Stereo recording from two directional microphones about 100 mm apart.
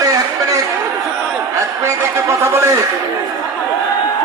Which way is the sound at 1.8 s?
25° right (ahead or behind).